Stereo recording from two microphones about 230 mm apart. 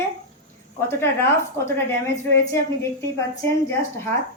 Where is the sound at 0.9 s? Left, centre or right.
Centre.